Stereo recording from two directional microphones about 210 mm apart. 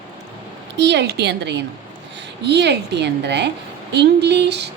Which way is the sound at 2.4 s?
55° right (ahead or behind).